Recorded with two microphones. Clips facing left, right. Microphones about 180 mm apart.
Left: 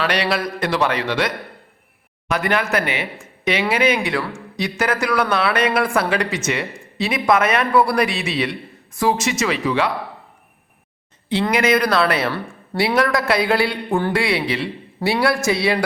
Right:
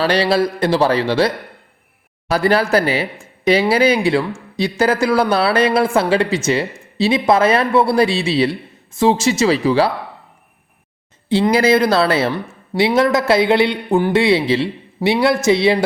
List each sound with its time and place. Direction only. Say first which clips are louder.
0.0 s speech: right 6 dB; 30° right (ahead or behind)
11.3 s speech: right 4 dB; 30° right (ahead or behind)